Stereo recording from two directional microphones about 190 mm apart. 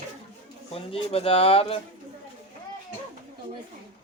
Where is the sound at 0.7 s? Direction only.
30° left (ahead or behind).